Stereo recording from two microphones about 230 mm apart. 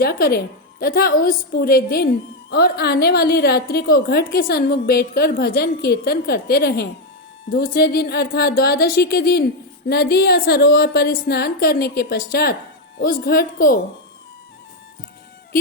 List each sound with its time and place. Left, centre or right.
0.0 s a woman's voice: left